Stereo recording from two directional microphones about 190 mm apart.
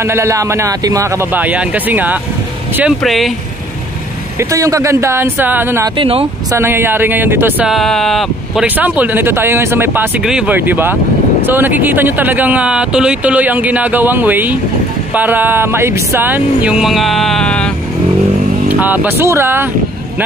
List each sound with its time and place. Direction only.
0.0 s speech: 15° right (ahead or behind)
4.4 s speech: 15° right (ahead or behind)
5.9 s speech: 30° right (ahead or behind)
6.5 s speech: 10° right (ahead or behind); by 17.7 s 5° left (ahead or behind)
18.7 s speech: 10° right (ahead or behind)